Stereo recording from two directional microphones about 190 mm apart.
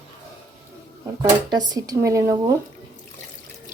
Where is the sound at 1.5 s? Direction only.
20° right (ahead or behind).